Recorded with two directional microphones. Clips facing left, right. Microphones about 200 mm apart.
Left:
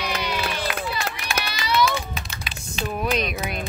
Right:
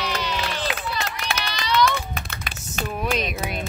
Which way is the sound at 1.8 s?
60° right (ahead or behind).